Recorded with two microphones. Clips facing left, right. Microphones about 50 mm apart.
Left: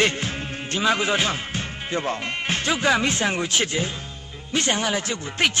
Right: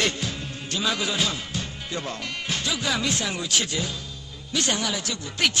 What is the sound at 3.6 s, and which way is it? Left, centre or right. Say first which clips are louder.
A man's voice: left 4 dB; left.